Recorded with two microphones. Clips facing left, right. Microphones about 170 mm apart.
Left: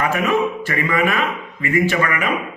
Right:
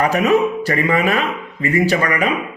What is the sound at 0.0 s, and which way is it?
A man's voice, 40° right (ahead or behind).